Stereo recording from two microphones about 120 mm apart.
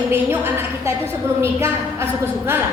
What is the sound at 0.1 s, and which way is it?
A woman's voice, 20° right (ahead or behind).